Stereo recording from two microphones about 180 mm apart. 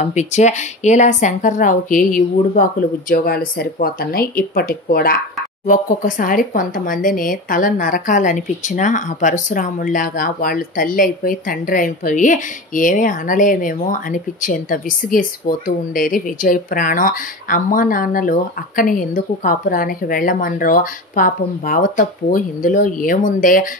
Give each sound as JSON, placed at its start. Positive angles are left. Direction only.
{"t": 0.0, "sound": "speech", "side_deg": 40}